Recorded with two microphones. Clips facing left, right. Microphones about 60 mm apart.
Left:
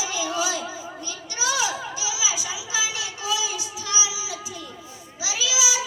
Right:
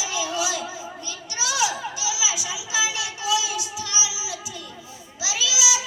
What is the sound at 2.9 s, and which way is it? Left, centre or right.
Child singing, left.